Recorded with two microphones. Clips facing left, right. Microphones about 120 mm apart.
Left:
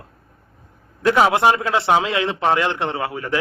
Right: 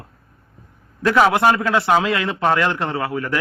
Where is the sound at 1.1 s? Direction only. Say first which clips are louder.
Even; 20° left (ahead or behind).